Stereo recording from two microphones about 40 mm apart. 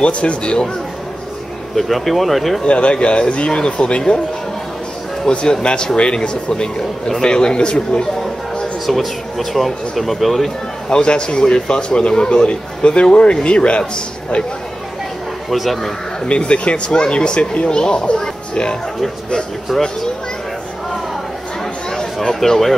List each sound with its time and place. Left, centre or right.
0.0 s speech: left
1.8 s speech: centre
2.6 s speech: left
5.3 s speech: left
8.8 s speech: centre
10.9 s speech: left
15.5 s speech: centre
16.3 s speech: left
22.3 s speech: centre